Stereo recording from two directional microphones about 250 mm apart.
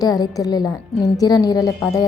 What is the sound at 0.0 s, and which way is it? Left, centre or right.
A woman's voice, centre.